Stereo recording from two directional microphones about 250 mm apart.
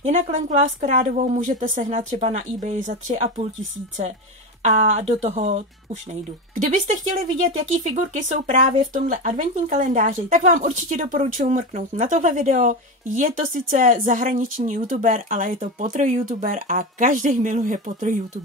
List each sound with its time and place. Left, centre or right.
0.0 s speech: right
4.6 s speech: right